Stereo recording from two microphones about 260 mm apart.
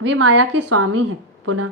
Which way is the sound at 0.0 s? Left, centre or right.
Right.